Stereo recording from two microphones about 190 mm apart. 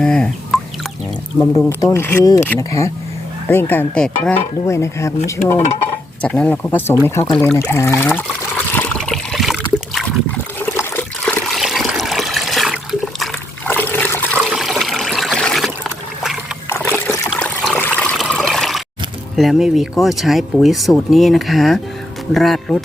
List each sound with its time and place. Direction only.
0.0 s fowl: 5° left (ahead or behind)
1.4 s speech: 15° left (ahead or behind)
7.3 s speech: centre (ahead or behind)
7.5 s speech: 15° left (ahead or behind)
8.5 s trickle: 10° left (ahead or behind)
13.7 s toilet flush: 10° left (ahead or behind)
14.4 s trickle: centre (ahead or behind)
18.0 s water: 5° left (ahead or behind)
19.4 s speech: centre (ahead or behind)